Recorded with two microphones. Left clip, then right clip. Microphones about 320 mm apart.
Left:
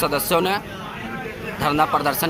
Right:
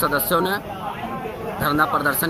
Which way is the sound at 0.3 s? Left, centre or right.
Centre.